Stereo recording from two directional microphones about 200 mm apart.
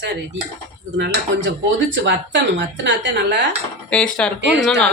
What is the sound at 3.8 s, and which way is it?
Speech, 5° left (ahead or behind).